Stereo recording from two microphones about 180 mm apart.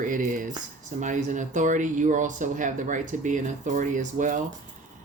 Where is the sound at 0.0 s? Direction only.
45° right (ahead or behind).